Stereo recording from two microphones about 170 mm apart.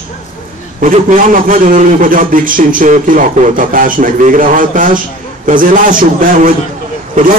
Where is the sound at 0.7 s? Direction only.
50° right (ahead or behind).